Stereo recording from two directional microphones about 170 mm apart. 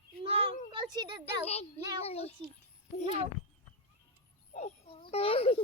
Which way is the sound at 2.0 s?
35° left (ahead or behind).